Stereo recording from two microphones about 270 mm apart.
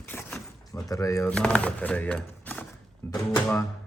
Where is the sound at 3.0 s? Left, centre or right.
Centre.